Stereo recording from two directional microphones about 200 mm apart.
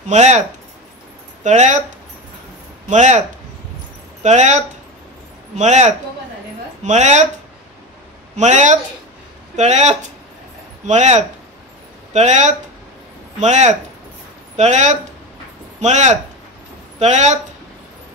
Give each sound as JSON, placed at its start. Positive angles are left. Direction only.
{"t": 0.1, "sound": "speech", "side_deg": -35}
{"t": 1.4, "sound": "speech", "side_deg": -35}
{"t": 8.4, "sound": "speech", "side_deg": -35}